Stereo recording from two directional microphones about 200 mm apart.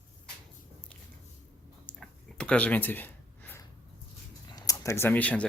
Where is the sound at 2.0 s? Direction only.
5° left (ahead or behind).